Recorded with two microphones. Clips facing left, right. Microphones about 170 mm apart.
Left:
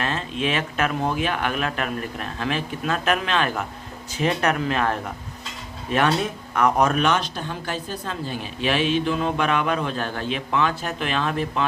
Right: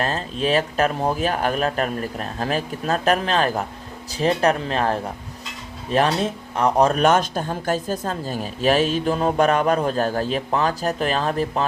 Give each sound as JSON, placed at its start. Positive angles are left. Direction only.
{"t": 0.0, "sound": "speech", "side_deg": -35}